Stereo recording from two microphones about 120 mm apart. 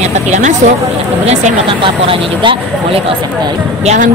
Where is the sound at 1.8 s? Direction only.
45° right (ahead or behind).